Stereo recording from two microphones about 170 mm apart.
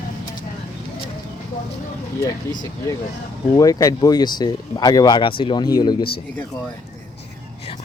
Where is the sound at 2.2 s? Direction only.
20° left (ahead or behind).